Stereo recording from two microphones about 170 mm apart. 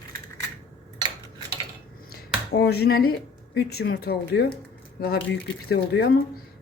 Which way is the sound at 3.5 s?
70° left (ahead or behind).